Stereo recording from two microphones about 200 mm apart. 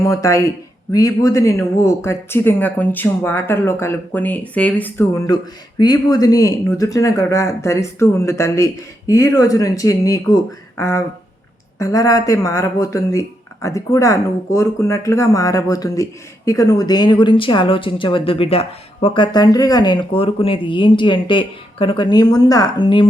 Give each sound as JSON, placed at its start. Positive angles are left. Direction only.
{"t": 0.0, "sound": "speech", "side_deg": 15}